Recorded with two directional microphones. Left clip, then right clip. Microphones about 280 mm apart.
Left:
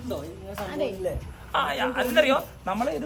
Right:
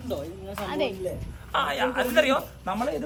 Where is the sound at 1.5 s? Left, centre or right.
Centre.